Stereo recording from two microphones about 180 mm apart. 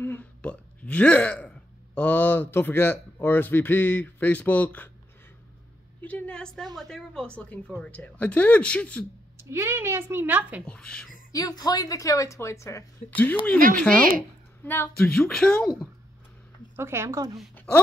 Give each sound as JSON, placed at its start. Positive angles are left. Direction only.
{"t": 0.0, "sound": "speech", "side_deg": 10}
{"t": 5.9, "sound": "speech", "side_deg": 10}
{"t": 9.5, "sound": "a woman's voice", "side_deg": -15}
{"t": 10.6, "sound": "speech", "side_deg": 5}
{"t": 11.3, "sound": "speech", "side_deg": 20}
{"t": 16.7, "sound": "a woman's voice", "side_deg": -15}